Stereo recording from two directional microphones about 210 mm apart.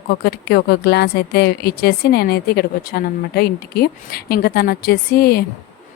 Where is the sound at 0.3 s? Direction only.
50° left (ahead or behind).